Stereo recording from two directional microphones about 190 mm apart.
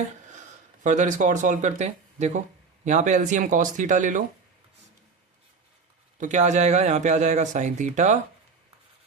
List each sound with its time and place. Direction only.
0.3 s speech: 40° right (ahead or behind)
6.1 s speech: 40° right (ahead or behind)